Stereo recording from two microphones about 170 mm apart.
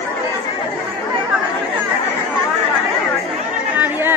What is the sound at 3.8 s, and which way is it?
Chatter, 10° right (ahead or behind).